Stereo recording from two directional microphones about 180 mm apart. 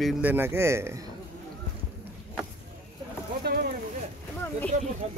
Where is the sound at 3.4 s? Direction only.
60° right (ahead or behind).